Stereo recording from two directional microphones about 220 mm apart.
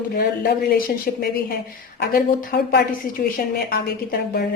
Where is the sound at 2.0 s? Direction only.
45° left (ahead or behind).